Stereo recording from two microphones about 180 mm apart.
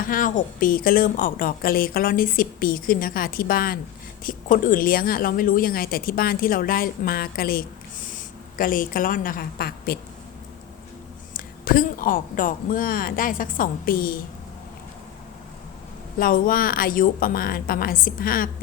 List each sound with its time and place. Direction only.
0.0 s a woman's voice: 50° left (ahead or behind)
11.3 s a woman's voice: 50° left (ahead or behind)
16.1 s a woman's voice: 50° left (ahead or behind)